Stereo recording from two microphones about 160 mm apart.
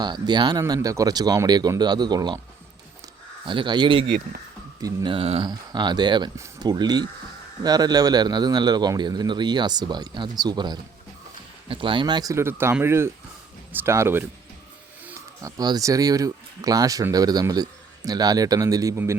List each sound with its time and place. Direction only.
0.0 s speech: 25° right (ahead or behind)
3.4 s speech: 30° right (ahead or behind)
4.8 s speech: 20° right (ahead or behind)
5.1 s speech: 35° right (ahead or behind); by 14.3 s 15° right (ahead or behind)
15.4 s speech: 20° right (ahead or behind)